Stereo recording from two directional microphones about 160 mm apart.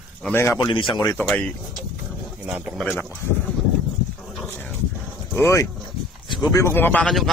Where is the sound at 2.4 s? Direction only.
10° right (ahead or behind).